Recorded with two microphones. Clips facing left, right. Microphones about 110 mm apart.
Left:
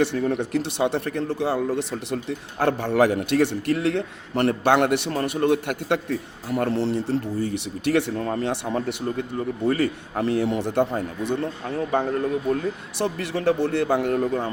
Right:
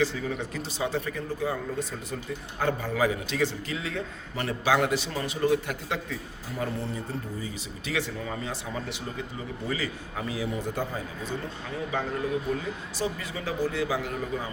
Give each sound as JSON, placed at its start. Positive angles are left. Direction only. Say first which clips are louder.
{"t": 0.0, "sound": "a man's voice", "louder": "left 6 dB", "side_deg": 65}
{"t": 13.0, "sound": "speech", "louder": "left 7 dB", "side_deg": 70}